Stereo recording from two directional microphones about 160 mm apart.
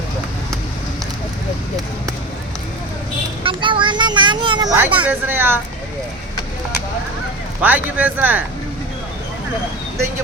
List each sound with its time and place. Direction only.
3.4 s vehicle: 30° right (ahead or behind)
4.7 s speech: 10° right (ahead or behind)
7.6 s speech: 10° right (ahead or behind)